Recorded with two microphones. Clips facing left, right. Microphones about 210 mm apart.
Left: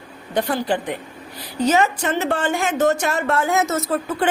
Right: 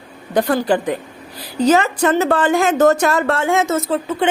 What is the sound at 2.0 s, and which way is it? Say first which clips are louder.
Speech: right 6 dB; 40° right (ahead or behind).